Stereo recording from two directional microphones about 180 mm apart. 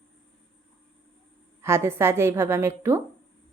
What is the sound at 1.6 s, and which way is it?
Speech, 15° right (ahead or behind).